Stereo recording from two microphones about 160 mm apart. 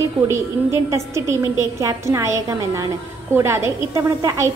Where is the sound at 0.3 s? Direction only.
15° right (ahead or behind).